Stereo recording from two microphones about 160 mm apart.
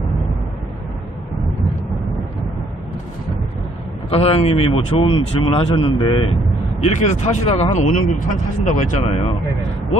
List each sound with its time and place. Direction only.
4.1 s speech: 40° left (ahead or behind)
6.8 s speech: 45° left (ahead or behind)
9.0 s speech: 40° left (ahead or behind)